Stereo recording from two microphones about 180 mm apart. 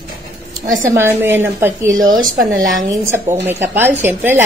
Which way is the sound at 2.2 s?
50° right (ahead or behind).